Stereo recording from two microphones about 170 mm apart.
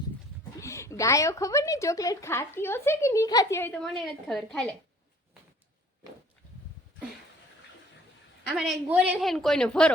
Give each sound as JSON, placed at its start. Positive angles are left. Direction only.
{"t": 0.6, "sound": "a woman's voice", "side_deg": 15}
{"t": 8.5, "sound": "a woman's voice", "side_deg": -5}